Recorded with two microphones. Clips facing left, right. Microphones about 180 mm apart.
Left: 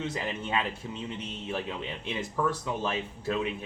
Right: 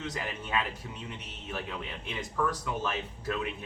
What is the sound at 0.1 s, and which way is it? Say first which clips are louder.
Speech: left 2 dB; 25° left (ahead or behind).